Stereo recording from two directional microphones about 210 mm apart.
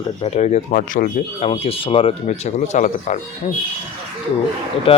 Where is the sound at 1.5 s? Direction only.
25° left (ahead or behind).